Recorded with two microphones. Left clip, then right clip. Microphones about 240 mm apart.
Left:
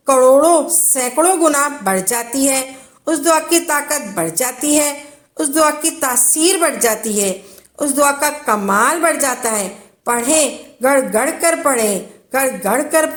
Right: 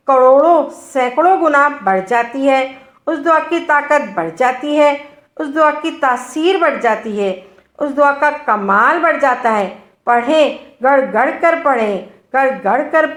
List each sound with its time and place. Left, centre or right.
0.0 s a woman's voice: left
10.8 s a woman's voice: left